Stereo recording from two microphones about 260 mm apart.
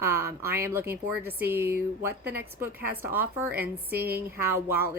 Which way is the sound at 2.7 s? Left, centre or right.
Right.